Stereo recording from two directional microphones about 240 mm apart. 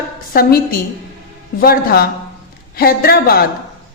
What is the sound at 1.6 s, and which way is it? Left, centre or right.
A woman's voice, left.